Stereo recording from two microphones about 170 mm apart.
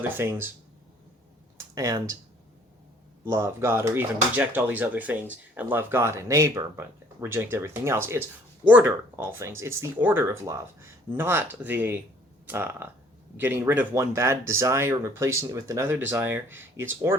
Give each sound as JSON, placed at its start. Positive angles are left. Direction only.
{"t": 0.0, "sound": "speech", "side_deg": -15}
{"t": 1.5, "sound": "speech", "side_deg": -20}
{"t": 3.2, "sound": "speech", "side_deg": -15}